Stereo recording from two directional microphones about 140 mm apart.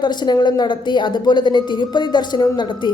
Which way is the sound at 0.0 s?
30° left (ahead or behind).